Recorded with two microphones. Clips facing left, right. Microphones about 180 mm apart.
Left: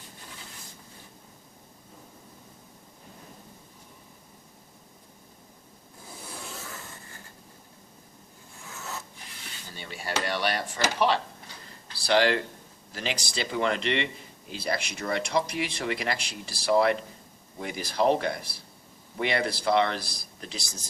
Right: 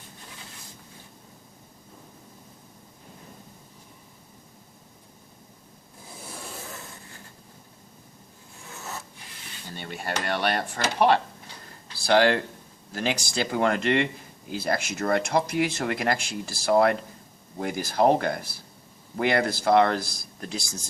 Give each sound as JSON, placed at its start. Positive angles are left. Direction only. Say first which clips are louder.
{"t": 9.7, "sound": "speech", "louder": "right 1 dB", "side_deg": -55}